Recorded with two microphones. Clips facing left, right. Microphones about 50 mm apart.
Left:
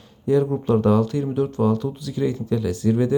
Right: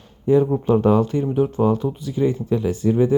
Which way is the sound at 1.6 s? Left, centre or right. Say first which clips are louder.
Right 2 dB; right.